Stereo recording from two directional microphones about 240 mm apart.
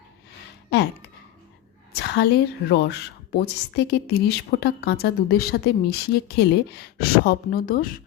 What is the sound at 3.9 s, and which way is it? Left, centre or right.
A woman's voice, left.